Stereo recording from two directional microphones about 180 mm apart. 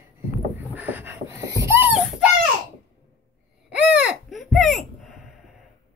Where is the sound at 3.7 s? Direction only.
5° right (ahead or behind).